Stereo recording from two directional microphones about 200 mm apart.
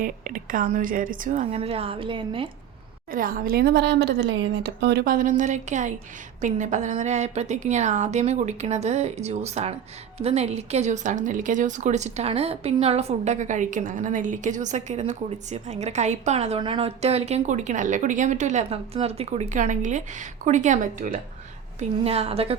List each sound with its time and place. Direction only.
0.0 s speech: 40° right (ahead or behind); by 2.5 s 25° right (ahead or behind)
3.1 s a woman's voice: 45° right (ahead or behind)
21.8 s a woman's voice: 30° right (ahead or behind)